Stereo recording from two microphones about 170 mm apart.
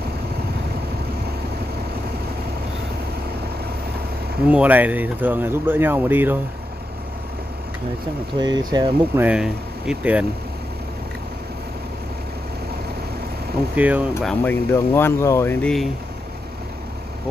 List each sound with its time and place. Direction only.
4.5 s speech: 10° right (ahead or behind)
8.4 s speech: 25° right (ahead or behind)
9.2 s speech: 5° right (ahead or behind)
13.7 s speech: 10° right (ahead or behind)
14.2 s speech: 10° left (ahead or behind)